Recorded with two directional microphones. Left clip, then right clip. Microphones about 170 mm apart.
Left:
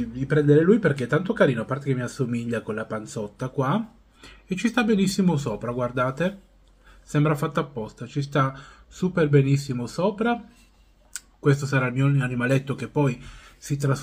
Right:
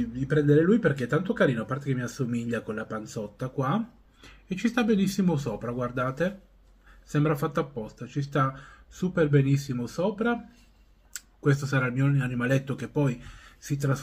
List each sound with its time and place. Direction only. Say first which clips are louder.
0.1 s speech: left 4 dB; centre (ahead or behind)